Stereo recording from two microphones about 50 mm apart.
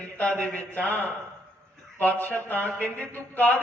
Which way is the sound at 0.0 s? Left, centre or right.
Left.